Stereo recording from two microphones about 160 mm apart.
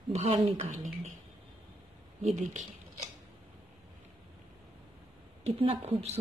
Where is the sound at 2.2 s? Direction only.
45° right (ahead or behind).